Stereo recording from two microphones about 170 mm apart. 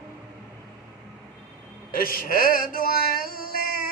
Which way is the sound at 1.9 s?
60° left (ahead or behind).